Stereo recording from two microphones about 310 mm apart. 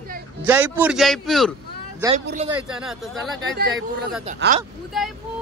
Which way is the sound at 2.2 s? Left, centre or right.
Right.